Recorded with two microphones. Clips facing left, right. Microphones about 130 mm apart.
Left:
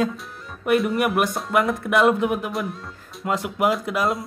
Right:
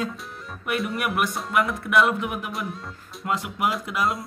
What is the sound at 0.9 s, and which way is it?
Speech, 30° left (ahead or behind).